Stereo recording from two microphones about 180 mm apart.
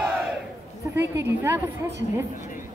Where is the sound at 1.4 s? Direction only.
15° right (ahead or behind).